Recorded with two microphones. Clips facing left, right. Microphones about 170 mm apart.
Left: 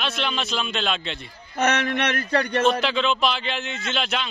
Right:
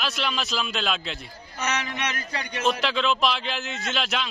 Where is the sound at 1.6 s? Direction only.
60° left (ahead or behind).